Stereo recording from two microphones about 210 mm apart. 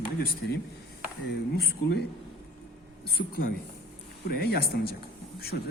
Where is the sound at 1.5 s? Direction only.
50° left (ahead or behind).